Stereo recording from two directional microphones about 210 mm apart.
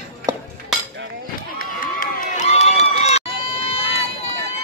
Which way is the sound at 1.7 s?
40° left (ahead or behind).